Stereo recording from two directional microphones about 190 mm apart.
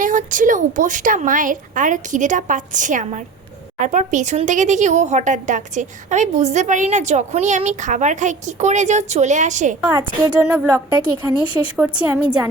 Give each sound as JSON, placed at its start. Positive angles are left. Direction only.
{"t": 0.0, "sound": "a woman's voice", "side_deg": -40}
{"t": 10.2, "sound": "speech", "side_deg": -20}
{"t": 11.4, "sound": "speech", "side_deg": 30}
{"t": 11.8, "sound": "a woman's voice", "side_deg": -10}